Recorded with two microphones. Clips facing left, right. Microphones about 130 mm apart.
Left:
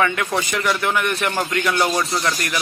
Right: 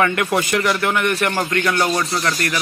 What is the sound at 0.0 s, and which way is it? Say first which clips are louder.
Speech: right 2 dB; 5° right (ahead or behind).